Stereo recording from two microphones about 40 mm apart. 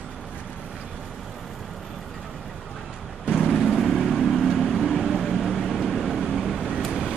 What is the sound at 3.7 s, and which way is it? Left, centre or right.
Vehicle, centre.